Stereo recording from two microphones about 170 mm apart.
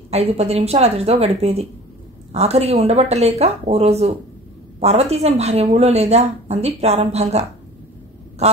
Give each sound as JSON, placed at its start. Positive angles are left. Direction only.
{"t": 0.1, "sound": "a woman's voice", "side_deg": -40}